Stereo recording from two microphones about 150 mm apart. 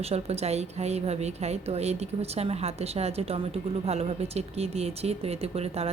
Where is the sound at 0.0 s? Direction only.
45° right (ahead or behind).